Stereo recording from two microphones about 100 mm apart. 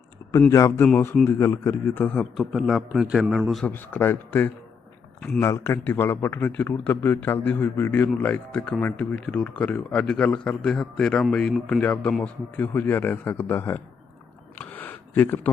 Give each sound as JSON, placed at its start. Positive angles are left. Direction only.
{"t": 0.5, "sound": "a man's voice", "side_deg": 30}
{"t": 2.3, "sound": "a man's voice", "side_deg": 0}
{"t": 3.7, "sound": "a man's voice", "side_deg": 20}
{"t": 14.6, "sound": "a sound", "side_deg": 15}